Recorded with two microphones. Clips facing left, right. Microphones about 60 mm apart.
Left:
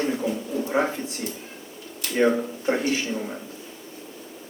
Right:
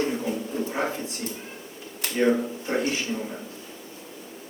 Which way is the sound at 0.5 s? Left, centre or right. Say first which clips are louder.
Left 1 dB; right.